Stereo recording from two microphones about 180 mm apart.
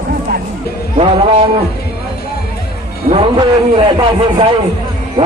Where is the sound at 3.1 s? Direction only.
30° right (ahead or behind).